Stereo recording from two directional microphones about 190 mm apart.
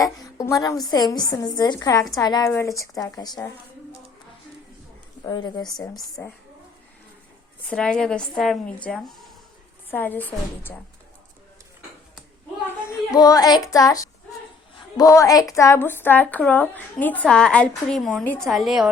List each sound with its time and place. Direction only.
0.0 s a woman's voice: 15° left (ahead or behind)
5.2 s a woman's voice: 20° left (ahead or behind)
7.6 s a woman's voice: 5° left (ahead or behind)
12.6 s a child's voice: 15° left (ahead or behind); by 18.9 s centre (ahead or behind)